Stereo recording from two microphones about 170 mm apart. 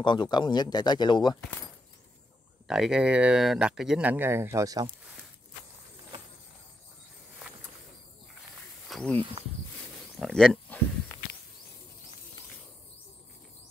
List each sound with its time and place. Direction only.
0.0 s speech: 25° left (ahead or behind)
2.7 s speech: 5° right (ahead or behind); by 4.9 s 20° right (ahead or behind)
8.8 s wild animals: 5° left (ahead or behind)
10.1 s speech: centre (ahead or behind)